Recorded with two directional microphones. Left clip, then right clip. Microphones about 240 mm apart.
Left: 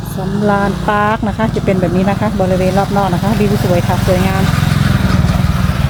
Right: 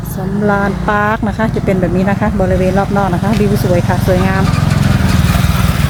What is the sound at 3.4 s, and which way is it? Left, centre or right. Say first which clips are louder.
Speech: even; left.